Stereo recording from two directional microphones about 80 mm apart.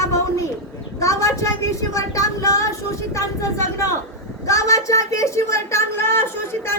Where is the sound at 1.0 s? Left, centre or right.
Left.